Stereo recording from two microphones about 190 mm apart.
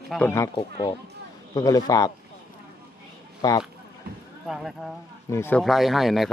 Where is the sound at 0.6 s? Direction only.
20° left (ahead or behind).